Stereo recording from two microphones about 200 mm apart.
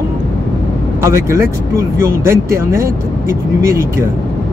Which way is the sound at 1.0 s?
15° right (ahead or behind).